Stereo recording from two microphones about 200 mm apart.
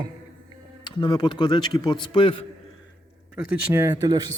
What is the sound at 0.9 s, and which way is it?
A man's voice, 25° left (ahead or behind).